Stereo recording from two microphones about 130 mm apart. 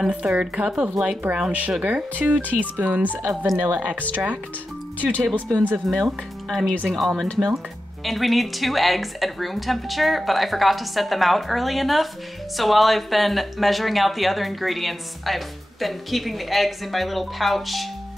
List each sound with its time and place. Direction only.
0.0 s speech: 5° right (ahead or behind)
5.3 s speech: 10° left (ahead or behind)
5.9 s speech: centre (ahead or behind)